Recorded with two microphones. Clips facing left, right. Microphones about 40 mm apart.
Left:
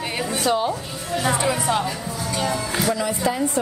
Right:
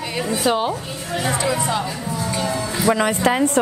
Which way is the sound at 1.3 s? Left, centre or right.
Centre.